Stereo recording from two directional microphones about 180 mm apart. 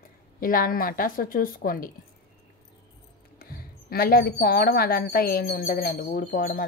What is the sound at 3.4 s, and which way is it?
A woman's voice, 55° left (ahead or behind).